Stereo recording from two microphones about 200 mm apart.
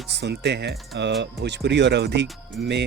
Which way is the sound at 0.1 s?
60° right (ahead or behind).